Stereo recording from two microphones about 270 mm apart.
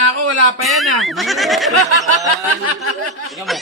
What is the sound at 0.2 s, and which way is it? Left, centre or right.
Speech, right.